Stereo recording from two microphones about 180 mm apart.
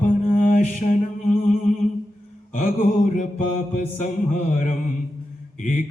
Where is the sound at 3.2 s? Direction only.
45° left (ahead or behind).